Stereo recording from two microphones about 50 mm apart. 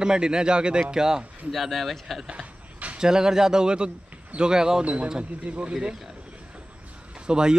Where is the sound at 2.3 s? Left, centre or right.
Right.